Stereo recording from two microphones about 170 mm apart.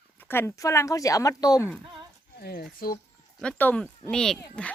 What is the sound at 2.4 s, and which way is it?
Speech, 65° left (ahead or behind).